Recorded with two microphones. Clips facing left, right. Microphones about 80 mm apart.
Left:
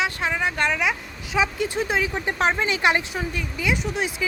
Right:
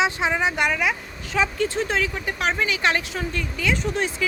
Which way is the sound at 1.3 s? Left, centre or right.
Centre.